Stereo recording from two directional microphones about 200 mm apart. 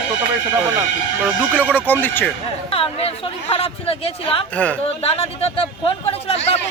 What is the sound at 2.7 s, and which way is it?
Speech, 30° left (ahead or behind).